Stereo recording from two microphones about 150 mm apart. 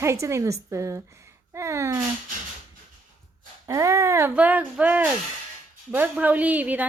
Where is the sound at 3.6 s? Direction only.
20° right (ahead or behind).